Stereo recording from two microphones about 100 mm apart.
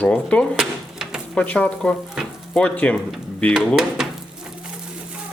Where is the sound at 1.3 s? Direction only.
15° left (ahead or behind).